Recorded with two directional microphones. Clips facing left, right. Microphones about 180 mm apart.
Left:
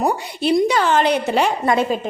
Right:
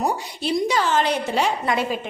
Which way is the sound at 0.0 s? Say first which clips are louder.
Left 5 dB; 60° left (ahead or behind).